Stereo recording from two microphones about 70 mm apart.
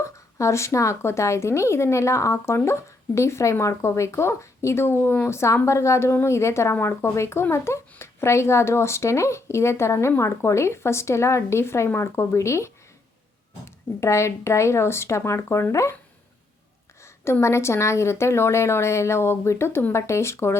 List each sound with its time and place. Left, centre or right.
0.0 s a woman's voice: left
14.0 s a woman's voice: left
17.4 s speech: left